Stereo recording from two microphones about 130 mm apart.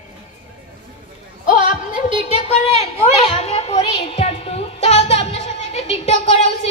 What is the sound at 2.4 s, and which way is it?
A woman's voice, 55° left (ahead or behind).